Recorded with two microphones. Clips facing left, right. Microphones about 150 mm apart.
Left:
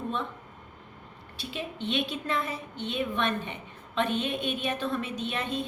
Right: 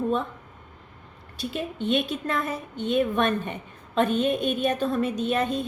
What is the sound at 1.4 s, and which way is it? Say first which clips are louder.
A woman's voice: right 6 dB; 45° right (ahead or behind).